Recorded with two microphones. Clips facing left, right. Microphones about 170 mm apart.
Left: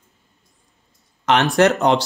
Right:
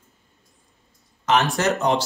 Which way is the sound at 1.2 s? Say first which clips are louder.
Left 5 dB; 65° left (ahead or behind).